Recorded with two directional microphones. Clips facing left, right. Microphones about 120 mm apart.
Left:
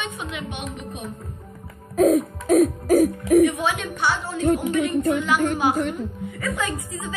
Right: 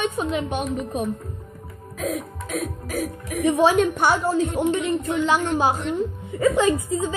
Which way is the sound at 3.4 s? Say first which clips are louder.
Right 5 dB; 35° right (ahead or behind).